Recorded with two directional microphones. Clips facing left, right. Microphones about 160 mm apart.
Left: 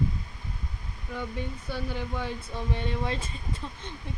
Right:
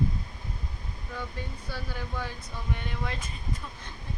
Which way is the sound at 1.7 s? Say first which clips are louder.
Left 4 dB; 20° left (ahead or behind).